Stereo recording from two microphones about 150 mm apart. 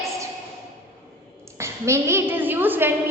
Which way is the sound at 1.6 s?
20° right (ahead or behind).